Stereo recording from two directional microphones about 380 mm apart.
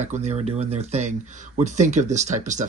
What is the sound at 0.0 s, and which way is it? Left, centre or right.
Speech, centre.